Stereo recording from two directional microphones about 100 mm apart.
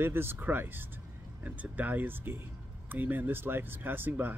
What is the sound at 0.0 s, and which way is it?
Speech, 25° right (ahead or behind).